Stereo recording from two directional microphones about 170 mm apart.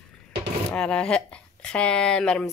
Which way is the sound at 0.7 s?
5° left (ahead or behind).